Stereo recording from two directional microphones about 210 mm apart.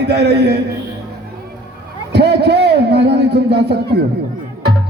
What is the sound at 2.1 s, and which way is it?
A man's voice, 50° right (ahead or behind).